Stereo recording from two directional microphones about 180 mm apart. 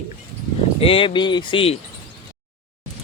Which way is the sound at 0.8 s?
30° left (ahead or behind).